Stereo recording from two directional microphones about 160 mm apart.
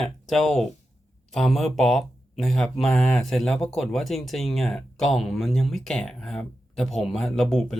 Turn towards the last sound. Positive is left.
turn(degrees=0)  # may be behind; listen again after turning